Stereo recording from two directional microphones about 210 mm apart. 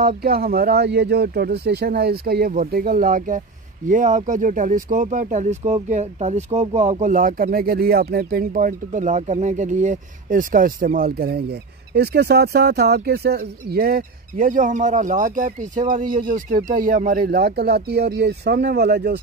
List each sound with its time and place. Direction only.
0.0 s speech: 45° right (ahead or behind)